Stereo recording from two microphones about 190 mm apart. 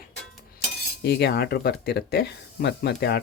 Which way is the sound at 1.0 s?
60° left (ahead or behind).